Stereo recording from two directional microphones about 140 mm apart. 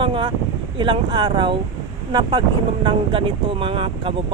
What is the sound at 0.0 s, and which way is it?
Speech, 35° right (ahead or behind).